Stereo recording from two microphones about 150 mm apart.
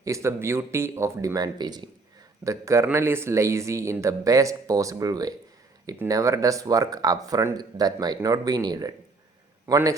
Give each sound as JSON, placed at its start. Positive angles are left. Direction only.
{"t": 0.0, "sound": "a man's voice", "side_deg": -20}